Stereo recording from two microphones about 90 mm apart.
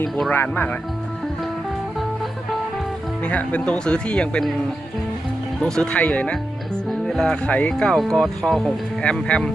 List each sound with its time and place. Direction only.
0.3 s speech: 20° left (ahead or behind)
3.2 s speech: 15° left (ahead or behind)
5.5 s speech: 10° left (ahead or behind)